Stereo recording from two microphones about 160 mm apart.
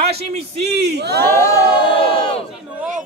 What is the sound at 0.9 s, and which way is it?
Speech, 90° right.